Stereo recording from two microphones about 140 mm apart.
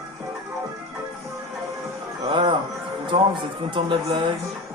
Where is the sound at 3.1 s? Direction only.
40° right (ahead or behind).